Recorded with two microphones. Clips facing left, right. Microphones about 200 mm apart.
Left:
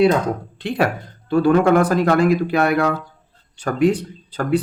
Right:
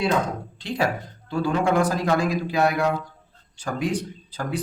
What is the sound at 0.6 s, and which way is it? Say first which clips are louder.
Speech: left 4 dB; 60° left (ahead or behind).